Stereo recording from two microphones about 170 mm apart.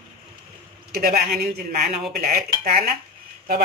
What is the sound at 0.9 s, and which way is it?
Speech, 65° right (ahead or behind).